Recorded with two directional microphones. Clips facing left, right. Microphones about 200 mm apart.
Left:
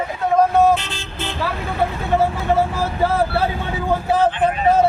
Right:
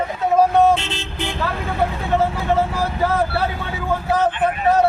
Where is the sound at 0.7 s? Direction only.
25° right (ahead or behind).